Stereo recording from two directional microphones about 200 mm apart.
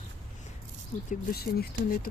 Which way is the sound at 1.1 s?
50° left (ahead or behind).